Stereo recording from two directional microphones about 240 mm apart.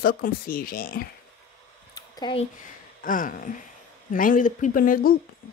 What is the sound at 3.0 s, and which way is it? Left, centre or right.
A woman's voice, left.